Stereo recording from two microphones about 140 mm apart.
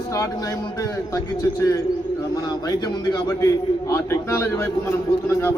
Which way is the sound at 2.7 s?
25° left (ahead or behind).